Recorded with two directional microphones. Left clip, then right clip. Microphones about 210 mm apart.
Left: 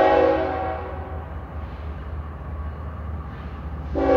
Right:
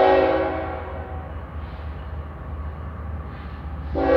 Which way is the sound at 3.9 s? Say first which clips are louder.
Even; 25° right (ahead or behind).